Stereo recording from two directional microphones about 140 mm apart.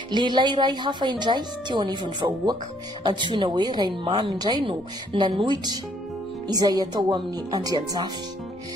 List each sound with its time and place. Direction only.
0.1 s speech: 35° right (ahead or behind)